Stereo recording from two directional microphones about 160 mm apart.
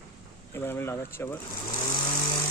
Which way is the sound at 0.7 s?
15° left (ahead or behind).